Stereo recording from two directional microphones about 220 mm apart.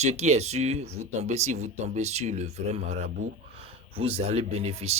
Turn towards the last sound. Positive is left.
turn(degrees=-30)  # may be behind; listen again after turning